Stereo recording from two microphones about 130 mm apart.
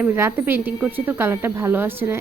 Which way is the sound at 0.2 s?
20° right (ahead or behind).